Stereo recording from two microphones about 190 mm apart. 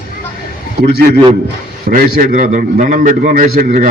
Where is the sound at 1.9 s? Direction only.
50° right (ahead or behind).